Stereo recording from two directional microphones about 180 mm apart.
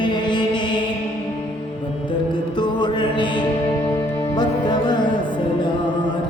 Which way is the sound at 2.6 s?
25° left (ahead or behind).